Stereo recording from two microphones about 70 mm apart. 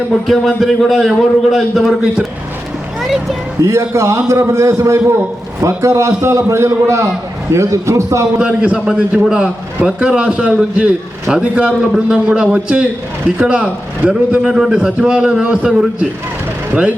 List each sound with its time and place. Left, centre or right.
0.3 s a man's voice: centre
3.6 s a man's voice: right
8.4 s a man's voice: centre